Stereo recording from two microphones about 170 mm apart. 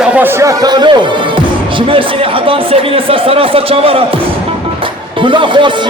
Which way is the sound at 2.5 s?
35° right (ahead or behind).